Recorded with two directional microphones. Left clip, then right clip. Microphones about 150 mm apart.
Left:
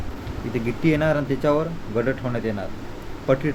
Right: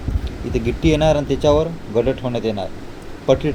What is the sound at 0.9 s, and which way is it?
Speech, 10° right (ahead or behind).